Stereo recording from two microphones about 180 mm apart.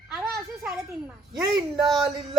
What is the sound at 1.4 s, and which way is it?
Speech, 20° right (ahead or behind).